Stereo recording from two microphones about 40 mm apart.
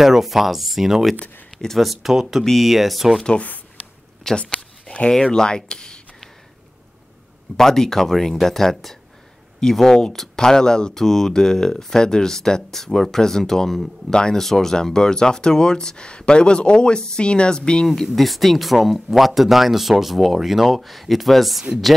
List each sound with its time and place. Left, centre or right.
0.0 s speech: centre
3.3 s speech: left
4.2 s speech: centre
4.8 s a sound: left
5.2 s speech: centre
7.5 s speech: centre
17.8 s speech: centre